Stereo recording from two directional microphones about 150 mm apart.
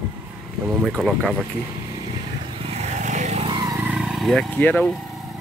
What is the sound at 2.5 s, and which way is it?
Vehicle, 40° right (ahead or behind).